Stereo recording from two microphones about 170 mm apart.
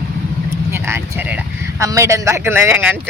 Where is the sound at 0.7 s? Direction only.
15° right (ahead or behind).